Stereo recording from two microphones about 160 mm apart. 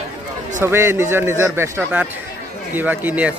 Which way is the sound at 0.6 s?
15° right (ahead or behind).